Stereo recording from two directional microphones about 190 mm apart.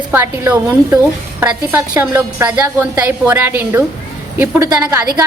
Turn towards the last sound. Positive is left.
turn(degrees=-20)  # may be behind; listen again after turning